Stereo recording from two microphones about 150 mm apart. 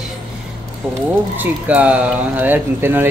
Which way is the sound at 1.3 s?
10° right (ahead or behind).